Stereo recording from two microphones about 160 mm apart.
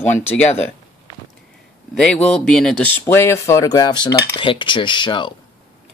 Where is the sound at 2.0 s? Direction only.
5° left (ahead or behind).